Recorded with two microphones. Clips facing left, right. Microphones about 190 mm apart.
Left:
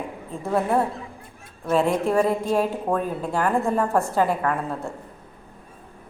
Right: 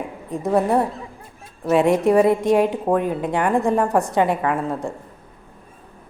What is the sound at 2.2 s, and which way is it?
Speech, 75° right (ahead or behind).